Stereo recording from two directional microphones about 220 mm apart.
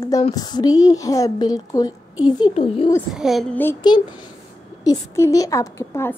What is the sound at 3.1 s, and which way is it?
Speech, centre (ahead or behind).